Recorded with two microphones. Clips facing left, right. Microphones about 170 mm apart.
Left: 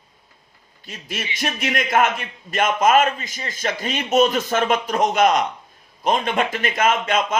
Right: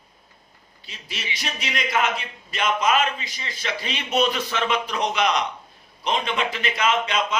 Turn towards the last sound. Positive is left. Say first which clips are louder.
# left 3 dB
turn(degrees=50)  # may be behind; listen again after turning